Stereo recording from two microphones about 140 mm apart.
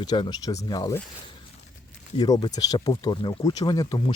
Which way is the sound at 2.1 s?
30° left (ahead or behind).